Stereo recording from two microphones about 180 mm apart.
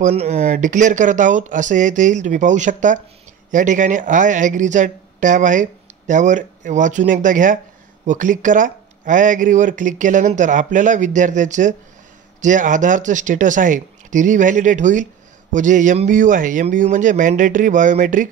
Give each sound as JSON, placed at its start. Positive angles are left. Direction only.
{"t": 0.0, "sound": "speech", "side_deg": -35}